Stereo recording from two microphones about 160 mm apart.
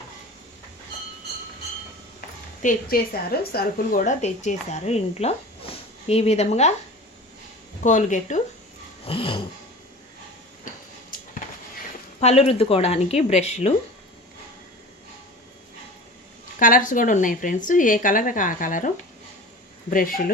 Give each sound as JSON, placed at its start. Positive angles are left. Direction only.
{"t": 2.6, "sound": "a woman's voice", "side_deg": 60}
{"t": 7.9, "sound": "a woman's voice", "side_deg": 50}
{"t": 9.0, "sound": "a woman's voice", "side_deg": 35}
{"t": 10.7, "sound": "tick-tock", "side_deg": 55}
{"t": 12.2, "sound": "a woman's voice", "side_deg": 40}
{"t": 16.6, "sound": "a woman's voice", "side_deg": 55}
{"t": 19.9, "sound": "a woman's voice", "side_deg": 60}